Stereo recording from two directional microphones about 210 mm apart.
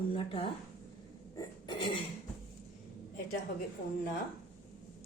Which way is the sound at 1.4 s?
20° left (ahead or behind).